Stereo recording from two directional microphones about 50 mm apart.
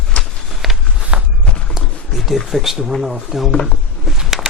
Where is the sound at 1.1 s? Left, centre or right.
Right.